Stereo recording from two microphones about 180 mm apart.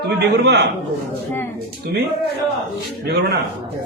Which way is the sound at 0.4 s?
70° right (ahead or behind).